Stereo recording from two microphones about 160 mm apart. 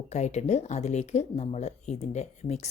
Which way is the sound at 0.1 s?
45° left (ahead or behind).